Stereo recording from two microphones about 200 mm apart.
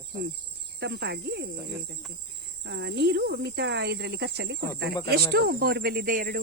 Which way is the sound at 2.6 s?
60° right (ahead or behind).